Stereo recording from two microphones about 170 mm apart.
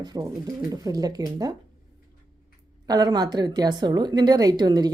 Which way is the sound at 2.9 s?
25° right (ahead or behind).